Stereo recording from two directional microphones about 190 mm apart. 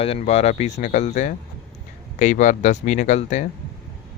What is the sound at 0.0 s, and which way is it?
Speech, 30° left (ahead or behind).